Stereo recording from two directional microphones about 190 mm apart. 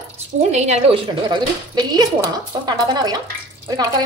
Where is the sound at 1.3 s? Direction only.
20° right (ahead or behind).